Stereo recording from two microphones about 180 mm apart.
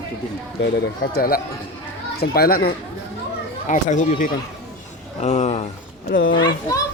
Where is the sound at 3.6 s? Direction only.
45° left (ahead or behind).